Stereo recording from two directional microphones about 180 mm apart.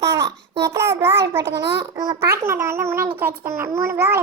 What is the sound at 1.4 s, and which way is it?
Speech, 65° right (ahead or behind).